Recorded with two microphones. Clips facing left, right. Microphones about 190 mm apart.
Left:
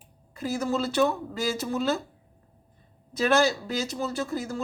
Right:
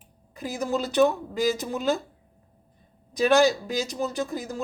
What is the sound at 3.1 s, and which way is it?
Speech, 15° right (ahead or behind).